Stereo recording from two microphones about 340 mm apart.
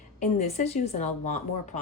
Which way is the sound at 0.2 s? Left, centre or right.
Centre.